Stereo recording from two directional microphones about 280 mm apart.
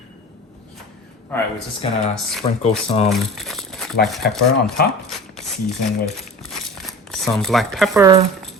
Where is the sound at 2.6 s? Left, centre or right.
Left.